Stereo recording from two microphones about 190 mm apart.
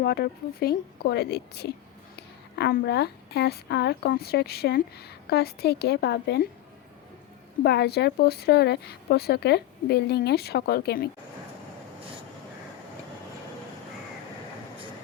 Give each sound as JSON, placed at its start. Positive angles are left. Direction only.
{"t": 0.0, "sound": "a woman's voice", "side_deg": 55}
{"t": 7.6, "sound": "a woman's voice", "side_deg": 60}